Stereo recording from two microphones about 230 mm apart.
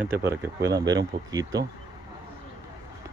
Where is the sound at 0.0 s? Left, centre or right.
Centre.